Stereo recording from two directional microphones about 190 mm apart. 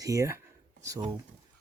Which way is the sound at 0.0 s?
15° right (ahead or behind).